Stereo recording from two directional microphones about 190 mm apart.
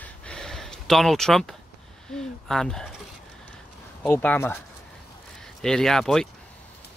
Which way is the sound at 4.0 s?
10° left (ahead or behind).